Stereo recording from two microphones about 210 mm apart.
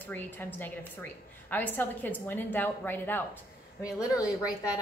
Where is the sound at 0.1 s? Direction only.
10° left (ahead or behind).